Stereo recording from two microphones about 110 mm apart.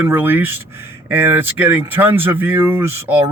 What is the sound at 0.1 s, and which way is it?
Speech, 15° right (ahead or behind).